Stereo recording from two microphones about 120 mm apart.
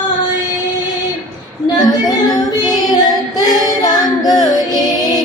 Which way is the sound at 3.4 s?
35° left (ahead or behind).